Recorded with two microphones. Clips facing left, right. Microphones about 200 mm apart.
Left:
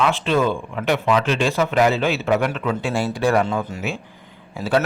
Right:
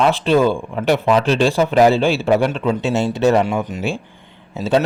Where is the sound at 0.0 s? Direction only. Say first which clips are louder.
Right 5 dB; 35° right (ahead or behind).